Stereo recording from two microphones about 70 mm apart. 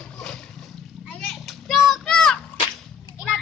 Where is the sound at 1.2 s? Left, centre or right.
Centre.